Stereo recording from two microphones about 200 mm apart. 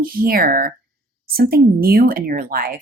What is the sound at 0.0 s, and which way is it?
Speech, 45° right (ahead or behind).